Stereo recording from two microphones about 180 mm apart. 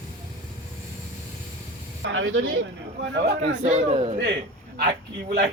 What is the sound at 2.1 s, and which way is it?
A man's voice, 90° right.